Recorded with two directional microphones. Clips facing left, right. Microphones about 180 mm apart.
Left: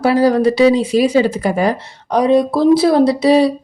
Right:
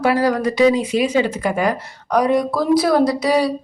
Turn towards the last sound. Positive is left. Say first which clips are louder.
# left 5 dB
turn(degrees=25)  # may be behind; listen again after turning